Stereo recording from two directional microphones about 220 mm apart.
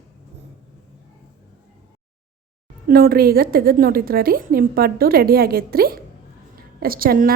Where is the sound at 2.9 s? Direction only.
45° right (ahead or behind).